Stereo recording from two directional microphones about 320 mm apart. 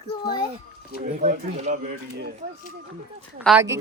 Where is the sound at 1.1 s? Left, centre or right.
Right.